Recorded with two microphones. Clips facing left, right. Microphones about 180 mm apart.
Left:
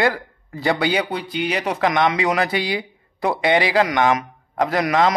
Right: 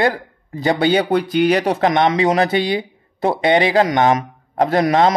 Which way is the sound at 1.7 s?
30° right (ahead or behind).